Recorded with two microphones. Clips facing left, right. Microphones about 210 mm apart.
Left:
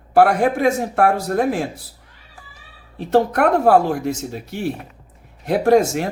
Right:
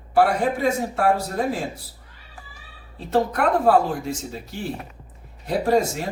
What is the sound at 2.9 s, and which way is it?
Speech, 70° left (ahead or behind).